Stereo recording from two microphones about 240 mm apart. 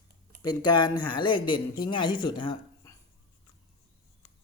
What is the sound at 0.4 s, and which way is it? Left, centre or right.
Speech, centre.